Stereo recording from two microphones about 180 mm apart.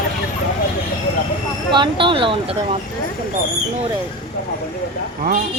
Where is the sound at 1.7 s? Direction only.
25° right (ahead or behind).